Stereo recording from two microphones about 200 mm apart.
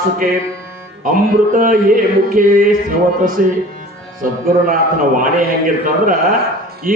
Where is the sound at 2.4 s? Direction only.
40° right (ahead or behind).